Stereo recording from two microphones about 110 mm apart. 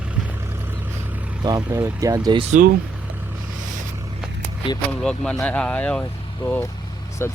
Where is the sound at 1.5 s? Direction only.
35° right (ahead or behind).